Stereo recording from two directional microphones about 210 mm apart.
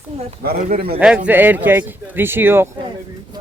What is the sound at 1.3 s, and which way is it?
Speech, 10° right (ahead or behind).